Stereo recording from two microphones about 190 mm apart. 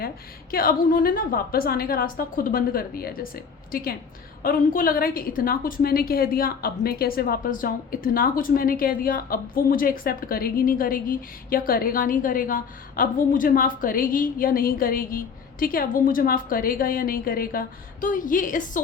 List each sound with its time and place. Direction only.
0.5 s a woman's voice: 50° left (ahead or behind)